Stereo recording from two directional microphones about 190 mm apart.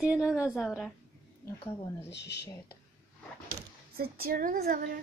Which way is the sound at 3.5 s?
55° right (ahead or behind).